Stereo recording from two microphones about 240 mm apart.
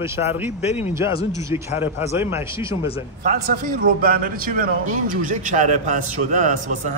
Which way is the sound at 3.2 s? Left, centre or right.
Right.